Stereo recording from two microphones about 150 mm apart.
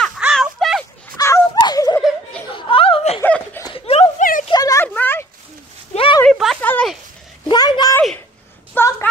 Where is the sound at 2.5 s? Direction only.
35° left (ahead or behind).